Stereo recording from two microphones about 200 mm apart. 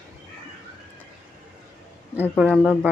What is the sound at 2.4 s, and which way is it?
Speech, 5° right (ahead or behind).